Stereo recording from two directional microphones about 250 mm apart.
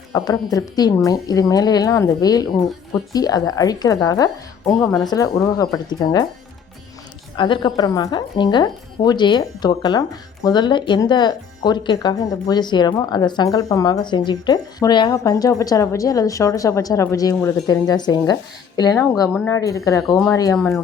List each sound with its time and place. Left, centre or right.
0.1 s a woman's voice: centre
7.3 s a woman's voice: centre